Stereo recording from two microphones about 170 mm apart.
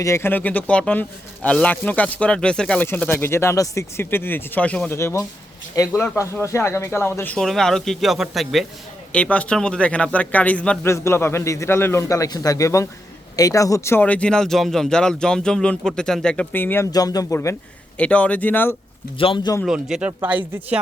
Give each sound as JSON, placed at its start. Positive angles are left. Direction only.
{"t": 0.0, "sound": "speech", "side_deg": 15}
{"t": 19.2, "sound": "speech", "side_deg": 30}
{"t": 19.6, "sound": "speech", "side_deg": -5}